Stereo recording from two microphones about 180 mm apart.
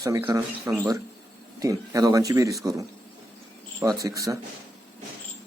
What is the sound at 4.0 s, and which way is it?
Speech, 20° right (ahead or behind).